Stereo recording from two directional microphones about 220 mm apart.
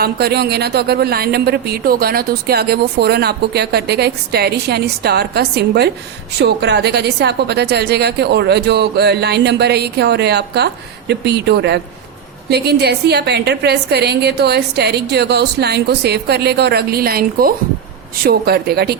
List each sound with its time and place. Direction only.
0.0 s speech: 45° right (ahead or behind)